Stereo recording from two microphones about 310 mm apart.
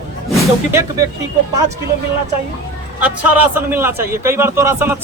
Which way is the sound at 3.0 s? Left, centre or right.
Centre.